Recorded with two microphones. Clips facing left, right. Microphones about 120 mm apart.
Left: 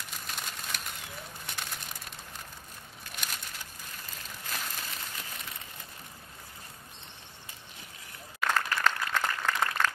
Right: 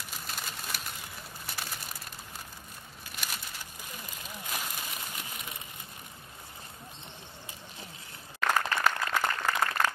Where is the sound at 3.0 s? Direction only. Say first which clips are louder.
Even; 5° right (ahead or behind).